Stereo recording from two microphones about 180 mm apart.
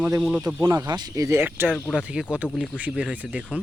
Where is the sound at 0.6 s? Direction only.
20° right (ahead or behind); by 3.6 s 5° right (ahead or behind).